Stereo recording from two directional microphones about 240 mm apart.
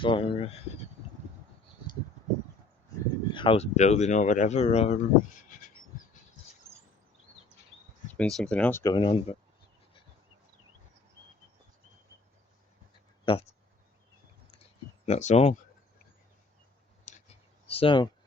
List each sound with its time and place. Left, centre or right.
0.0 s speech: left
3.2 s speech: left
8.2 s speech: centre
13.3 s speech: left
14.5 s a sound: left
17.1 s clicking: left